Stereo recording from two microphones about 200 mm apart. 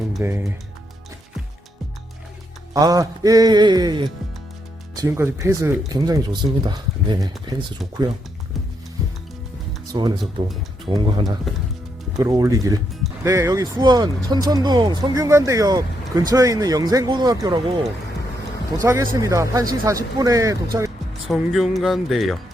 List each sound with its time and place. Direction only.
0.2 s speech: 10° right (ahead or behind)
2.7 s speech: 15° right (ahead or behind)
9.9 s speech: 20° right (ahead or behind)
12.1 s speech: 15° right (ahead or behind)
18.8 s speech: 15° right (ahead or behind)
21.2 s speech: centre (ahead or behind)